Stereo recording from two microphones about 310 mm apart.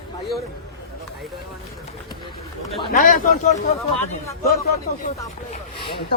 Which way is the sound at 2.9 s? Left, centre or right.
Left.